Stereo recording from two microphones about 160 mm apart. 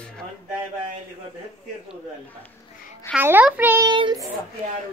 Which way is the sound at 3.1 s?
10° right (ahead or behind).